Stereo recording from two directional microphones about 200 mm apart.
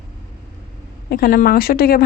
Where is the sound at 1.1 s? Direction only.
50° left (ahead or behind).